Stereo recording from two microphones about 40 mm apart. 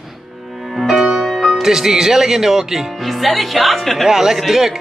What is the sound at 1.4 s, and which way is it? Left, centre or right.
Speech, centre.